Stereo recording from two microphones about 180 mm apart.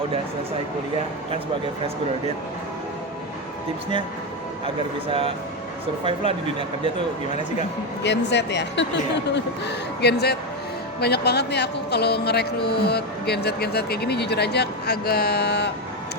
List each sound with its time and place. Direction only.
6.1 s speech: 30° right (ahead or behind)
8.0 s speech: 70° left (ahead or behind)